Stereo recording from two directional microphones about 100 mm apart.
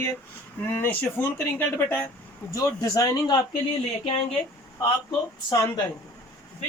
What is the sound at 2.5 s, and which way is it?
Speech, 35° left (ahead or behind).